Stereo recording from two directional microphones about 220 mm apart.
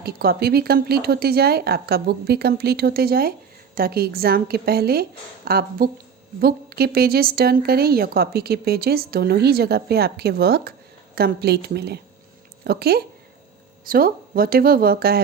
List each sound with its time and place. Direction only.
0.0 s a woman's voice: 45° right (ahead or behind)